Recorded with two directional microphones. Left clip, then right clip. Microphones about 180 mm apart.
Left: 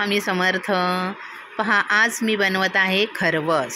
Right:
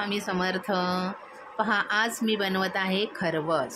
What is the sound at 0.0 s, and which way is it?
Speech, 20° left (ahead or behind).